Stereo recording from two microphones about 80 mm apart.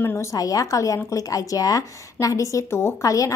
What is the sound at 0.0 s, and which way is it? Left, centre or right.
Speech, left.